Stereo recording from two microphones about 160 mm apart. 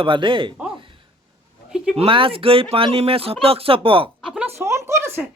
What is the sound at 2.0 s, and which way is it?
Speech, 35° right (ahead or behind).